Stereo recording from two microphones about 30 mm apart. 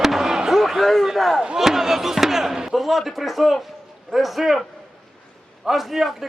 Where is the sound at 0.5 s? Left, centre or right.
Centre.